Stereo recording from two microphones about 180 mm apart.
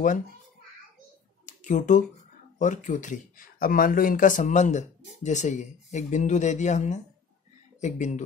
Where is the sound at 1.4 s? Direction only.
45° left (ahead or behind).